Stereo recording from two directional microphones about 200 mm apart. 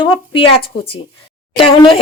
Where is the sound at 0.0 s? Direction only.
25° left (ahead or behind).